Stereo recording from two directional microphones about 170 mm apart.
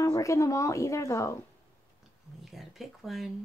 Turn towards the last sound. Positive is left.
turn(degrees=0)  # may be behind; listen again after turning